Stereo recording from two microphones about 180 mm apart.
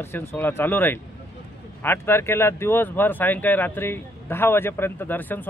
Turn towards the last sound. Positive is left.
turn(degrees=10)  # may be behind; listen again after turning